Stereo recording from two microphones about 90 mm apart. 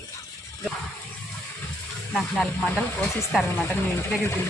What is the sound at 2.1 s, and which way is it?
Speech, 10° left (ahead or behind).